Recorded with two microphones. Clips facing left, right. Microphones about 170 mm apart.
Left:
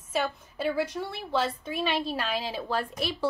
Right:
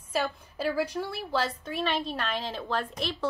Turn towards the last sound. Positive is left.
turn(degrees=5)  # may be behind; listen again after turning